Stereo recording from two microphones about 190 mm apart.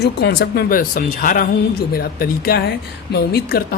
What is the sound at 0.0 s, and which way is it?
Speech, 55° left (ahead or behind).